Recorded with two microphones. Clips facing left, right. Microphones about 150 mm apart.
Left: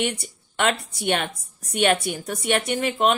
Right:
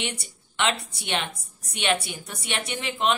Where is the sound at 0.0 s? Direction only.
45° left (ahead or behind).